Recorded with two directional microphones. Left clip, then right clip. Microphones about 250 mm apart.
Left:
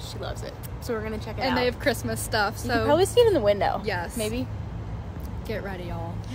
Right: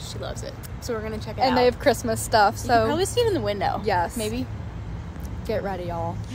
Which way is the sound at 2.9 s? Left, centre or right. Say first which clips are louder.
Left 4 dB; left.